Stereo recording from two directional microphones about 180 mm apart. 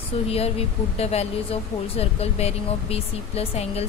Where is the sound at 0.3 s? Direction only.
35° left (ahead or behind).